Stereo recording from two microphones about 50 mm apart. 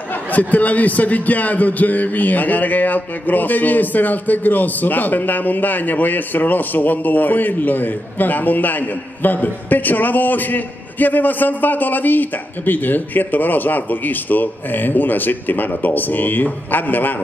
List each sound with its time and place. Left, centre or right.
0.1 s a man's voice: left